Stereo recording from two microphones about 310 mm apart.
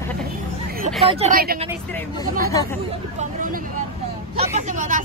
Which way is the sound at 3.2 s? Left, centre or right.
Right.